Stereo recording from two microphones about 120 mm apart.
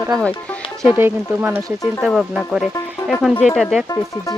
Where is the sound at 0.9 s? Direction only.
15° right (ahead or behind).